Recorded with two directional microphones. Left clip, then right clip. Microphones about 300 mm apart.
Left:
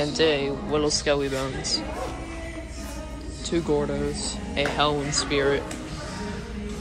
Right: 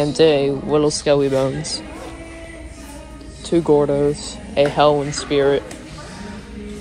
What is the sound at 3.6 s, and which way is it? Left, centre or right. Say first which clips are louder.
Speech: right 12 dB; centre.